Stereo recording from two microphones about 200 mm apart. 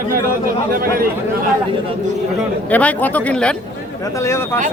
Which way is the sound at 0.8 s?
45° right (ahead or behind).